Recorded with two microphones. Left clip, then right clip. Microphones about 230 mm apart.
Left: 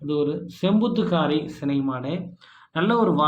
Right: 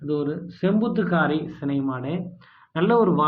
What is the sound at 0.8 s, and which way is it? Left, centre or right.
Speech, right.